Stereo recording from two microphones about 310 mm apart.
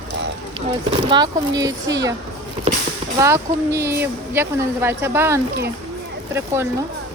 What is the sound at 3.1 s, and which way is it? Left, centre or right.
A woman's voice, centre.